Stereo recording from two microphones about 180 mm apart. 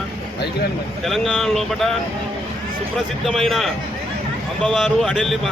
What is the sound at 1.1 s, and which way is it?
Speech, centre (ahead or behind).